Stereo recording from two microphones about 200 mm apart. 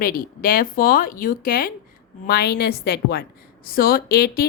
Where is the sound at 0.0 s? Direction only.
45° left (ahead or behind).